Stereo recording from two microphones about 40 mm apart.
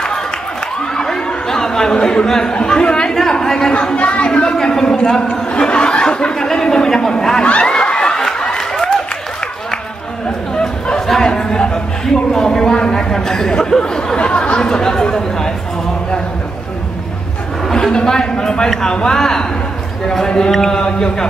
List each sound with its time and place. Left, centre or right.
0.9 s chatter: centre
2.2 s speech: centre
2.5 s speech: left
3.2 s a woman's voice: centre
3.9 s speech: left
4.3 s speech: left
7.6 s a sound: left
10.5 s chatter: centre
11.1 s a sound: centre
13.1 s speech: centre
14.6 s speech: centre
17.6 s a sound: centre
18.7 s speech: centre